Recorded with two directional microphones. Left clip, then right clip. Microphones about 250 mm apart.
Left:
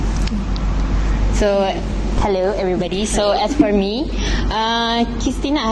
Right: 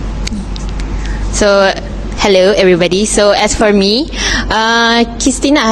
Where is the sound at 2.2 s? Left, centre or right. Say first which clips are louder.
Right 10 dB; right.